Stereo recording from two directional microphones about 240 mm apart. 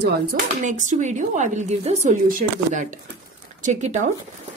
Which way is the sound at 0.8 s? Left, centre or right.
Right.